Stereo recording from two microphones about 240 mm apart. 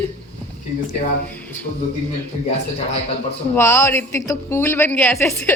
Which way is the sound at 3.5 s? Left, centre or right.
Centre.